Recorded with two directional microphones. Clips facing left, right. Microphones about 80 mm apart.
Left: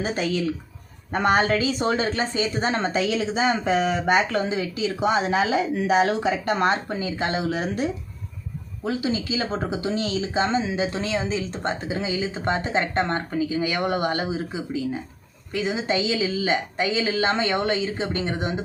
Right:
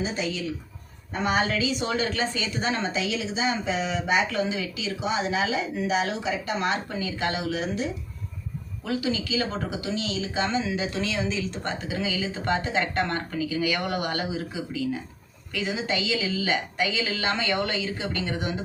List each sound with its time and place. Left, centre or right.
0.0 s a woman's voice: left
7.5 s a woman's voice: left
8.8 s speech: left